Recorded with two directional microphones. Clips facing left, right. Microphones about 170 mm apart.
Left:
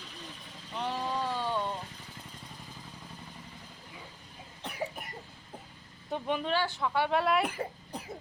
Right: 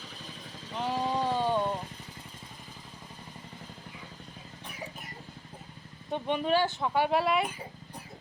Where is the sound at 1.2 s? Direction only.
20° right (ahead or behind).